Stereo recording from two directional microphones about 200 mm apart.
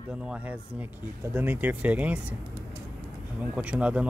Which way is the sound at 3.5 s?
5° right (ahead or behind).